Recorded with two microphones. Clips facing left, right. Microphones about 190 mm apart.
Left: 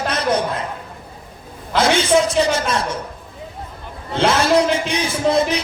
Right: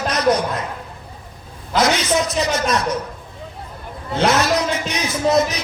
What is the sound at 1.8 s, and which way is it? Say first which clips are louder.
Music: left 3 dB; 30° left (ahead or behind).